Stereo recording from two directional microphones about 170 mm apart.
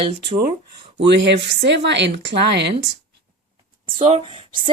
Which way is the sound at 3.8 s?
30° right (ahead or behind).